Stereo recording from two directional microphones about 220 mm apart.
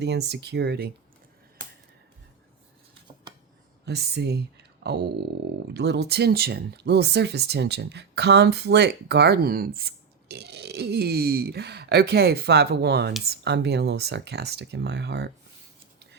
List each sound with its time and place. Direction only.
0.0 s speech: 50° right (ahead or behind)
3.8 s speech: 50° right (ahead or behind)